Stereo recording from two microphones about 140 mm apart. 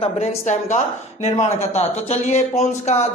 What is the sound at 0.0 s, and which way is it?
Speech, 55° left (ahead or behind).